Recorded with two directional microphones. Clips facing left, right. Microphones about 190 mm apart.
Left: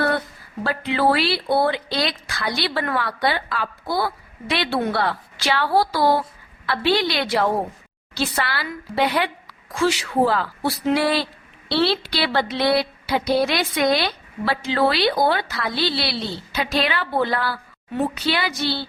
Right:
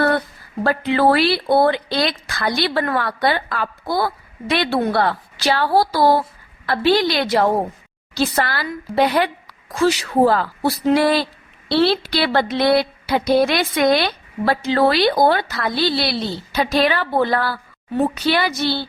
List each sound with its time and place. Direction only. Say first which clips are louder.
0.6 s speech: right 4 dB; 50° right (ahead or behind)